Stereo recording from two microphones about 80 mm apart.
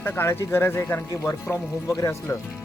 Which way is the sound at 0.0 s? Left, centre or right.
Left.